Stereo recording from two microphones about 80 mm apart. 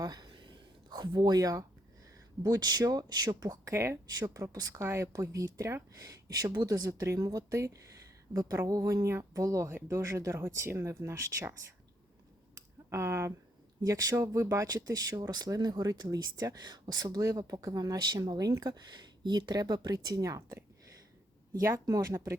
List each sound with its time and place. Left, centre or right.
0.0 s speech: right
0.3 s a sound: right
2.4 s speech: right
3.7 s speech: right
4.5 s speech: right
9.6 s speech: right
12.5 s a sound: right
13.8 s speech: right
21.8 s speech: right